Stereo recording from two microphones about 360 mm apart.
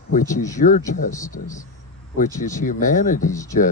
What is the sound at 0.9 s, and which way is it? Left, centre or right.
Speech, left.